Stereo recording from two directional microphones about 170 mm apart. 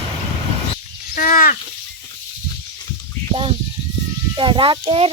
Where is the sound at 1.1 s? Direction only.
55° left (ahead or behind).